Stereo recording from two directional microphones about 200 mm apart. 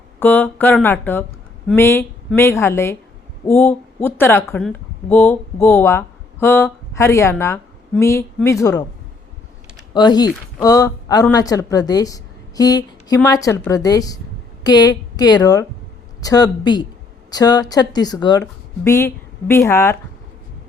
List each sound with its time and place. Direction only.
0.2 s a woman's voice: 10° left (ahead or behind)
9.9 s a woman's voice: 20° left (ahead or behind)